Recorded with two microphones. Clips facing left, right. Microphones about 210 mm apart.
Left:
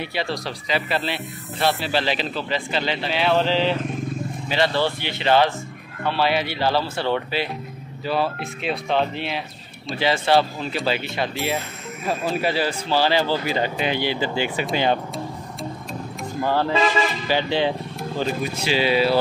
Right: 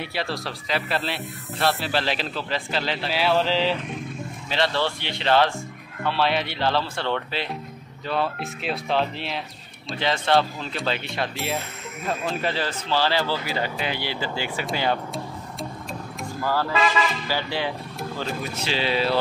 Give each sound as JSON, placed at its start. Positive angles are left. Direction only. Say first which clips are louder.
{"t": 0.0, "sound": "speech", "louder": "left 2 dB", "side_deg": 0}
{"t": 16.3, "sound": "speech", "louder": "left 3 dB", "side_deg": 20}